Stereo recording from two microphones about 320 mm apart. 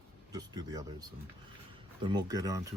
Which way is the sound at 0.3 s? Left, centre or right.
Centre.